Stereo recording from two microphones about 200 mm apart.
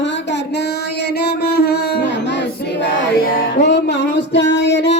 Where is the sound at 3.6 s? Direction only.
60° left (ahead or behind).